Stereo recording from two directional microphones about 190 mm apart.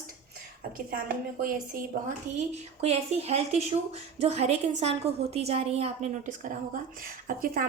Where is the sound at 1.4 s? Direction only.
50° right (ahead or behind).